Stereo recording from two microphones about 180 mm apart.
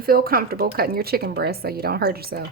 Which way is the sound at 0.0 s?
55° right (ahead or behind).